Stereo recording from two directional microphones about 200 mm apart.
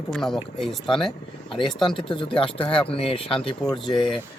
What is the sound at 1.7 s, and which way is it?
Speech, 25° left (ahead or behind).